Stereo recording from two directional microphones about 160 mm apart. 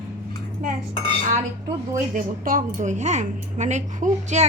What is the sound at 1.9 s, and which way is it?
A woman's voice, 60° right (ahead or behind).